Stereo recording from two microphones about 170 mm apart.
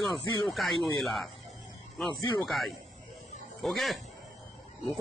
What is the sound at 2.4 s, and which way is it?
A man's voice, centre (ahead or behind).